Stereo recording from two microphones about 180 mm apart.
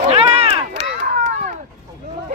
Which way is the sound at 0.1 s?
35° right (ahead or behind).